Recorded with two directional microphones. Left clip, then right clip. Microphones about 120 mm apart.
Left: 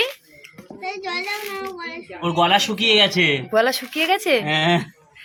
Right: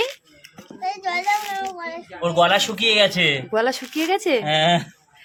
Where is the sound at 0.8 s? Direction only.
30° right (ahead or behind).